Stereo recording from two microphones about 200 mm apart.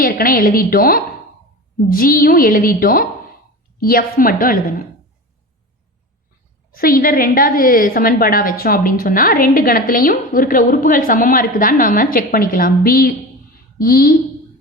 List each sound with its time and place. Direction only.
0.0 s a woman's voice: 45° left (ahead or behind)
6.7 s a woman's voice: 45° left (ahead or behind)